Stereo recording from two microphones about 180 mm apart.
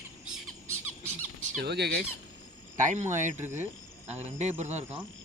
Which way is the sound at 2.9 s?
40° right (ahead or behind).